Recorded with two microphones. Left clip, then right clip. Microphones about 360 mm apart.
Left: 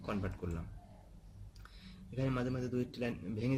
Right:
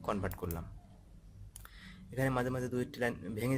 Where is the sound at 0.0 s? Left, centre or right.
Centre.